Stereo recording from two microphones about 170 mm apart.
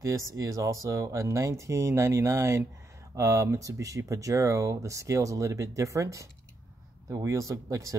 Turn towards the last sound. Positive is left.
turn(degrees=-20)  # may be behind; listen again after turning